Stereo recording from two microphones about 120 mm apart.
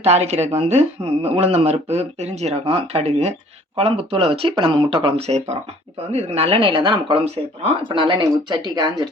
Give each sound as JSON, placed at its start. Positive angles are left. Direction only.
{"t": 0.0, "sound": "speech", "side_deg": -65}
{"t": 3.8, "sound": "speech", "side_deg": -50}